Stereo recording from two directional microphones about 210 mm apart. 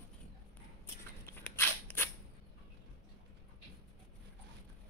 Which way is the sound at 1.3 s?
10° left (ahead or behind).